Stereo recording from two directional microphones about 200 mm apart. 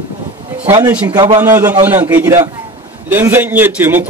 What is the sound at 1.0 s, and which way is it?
Speech, 20° right (ahead or behind).